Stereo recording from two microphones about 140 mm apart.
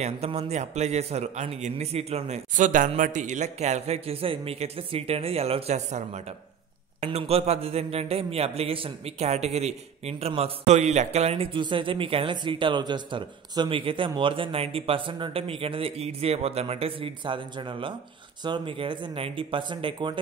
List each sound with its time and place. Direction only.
0.0 s a man's voice: 50° right (ahead or behind)